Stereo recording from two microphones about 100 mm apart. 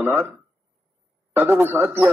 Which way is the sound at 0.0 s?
20° right (ahead or behind).